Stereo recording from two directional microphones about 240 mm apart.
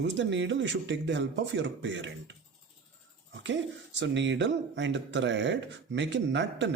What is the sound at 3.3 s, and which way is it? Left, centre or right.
Speech, right.